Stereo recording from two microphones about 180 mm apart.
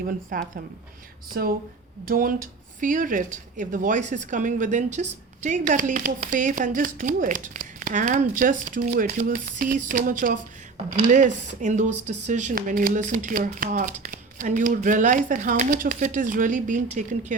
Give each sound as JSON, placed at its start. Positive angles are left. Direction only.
{"t": 0.0, "sound": "a woman's voice", "side_deg": -55}